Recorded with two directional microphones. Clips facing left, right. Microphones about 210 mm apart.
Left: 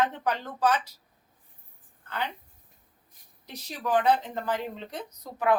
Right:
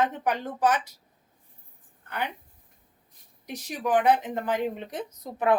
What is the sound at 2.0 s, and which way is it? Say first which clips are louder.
Speech: right 1 dB; 15° right (ahead or behind).